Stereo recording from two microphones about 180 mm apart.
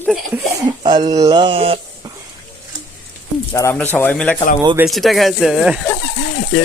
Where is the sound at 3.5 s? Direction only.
15° left (ahead or behind); by 5.8 s centre (ahead or behind).